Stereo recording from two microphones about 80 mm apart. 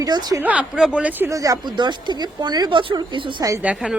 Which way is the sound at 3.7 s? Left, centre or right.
Centre.